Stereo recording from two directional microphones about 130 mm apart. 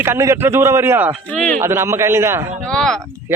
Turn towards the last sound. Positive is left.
turn(degrees=5)  # may be behind; listen again after turning